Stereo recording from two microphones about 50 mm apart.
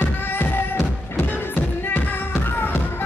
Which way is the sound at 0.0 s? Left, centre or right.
Left.